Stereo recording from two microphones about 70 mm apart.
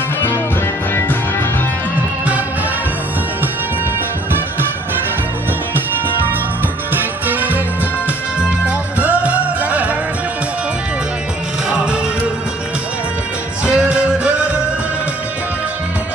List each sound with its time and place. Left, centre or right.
6.9 s music: right
8.6 s music: centre
13.7 s music: centre